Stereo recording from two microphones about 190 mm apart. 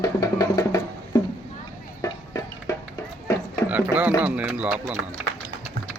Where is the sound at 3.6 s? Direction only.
10° right (ahead or behind).